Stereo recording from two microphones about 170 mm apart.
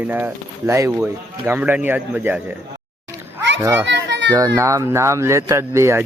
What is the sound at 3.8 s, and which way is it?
Children playing, 90° right.